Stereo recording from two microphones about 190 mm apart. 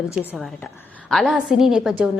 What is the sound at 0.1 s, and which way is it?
A woman's voice, 5° right (ahead or behind).